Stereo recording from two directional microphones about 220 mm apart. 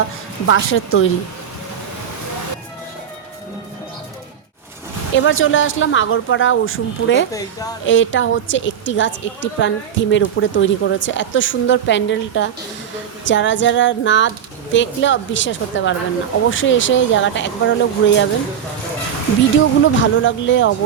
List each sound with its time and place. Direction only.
0.4 s speech: 65° left (ahead or behind)
5.1 s a woman's voice: 60° left (ahead or behind)
20.0 s a woman's voice: 60° left (ahead or behind)